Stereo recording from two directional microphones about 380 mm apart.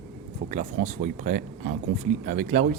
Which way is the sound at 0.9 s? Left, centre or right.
Centre.